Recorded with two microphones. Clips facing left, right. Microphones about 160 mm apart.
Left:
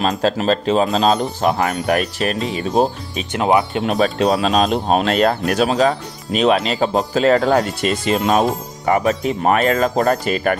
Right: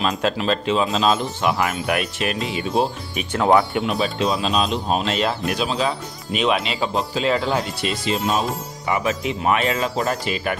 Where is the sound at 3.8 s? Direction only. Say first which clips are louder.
Left 5 dB; 45° left (ahead or behind).